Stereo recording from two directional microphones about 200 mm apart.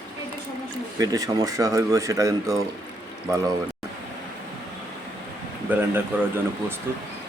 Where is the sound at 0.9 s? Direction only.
20° right (ahead or behind).